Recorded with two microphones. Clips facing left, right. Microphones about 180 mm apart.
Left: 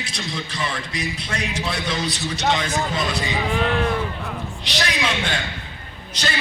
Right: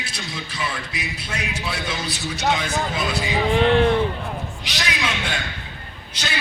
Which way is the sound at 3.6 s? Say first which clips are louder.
Right 6 dB; 30° right (ahead or behind).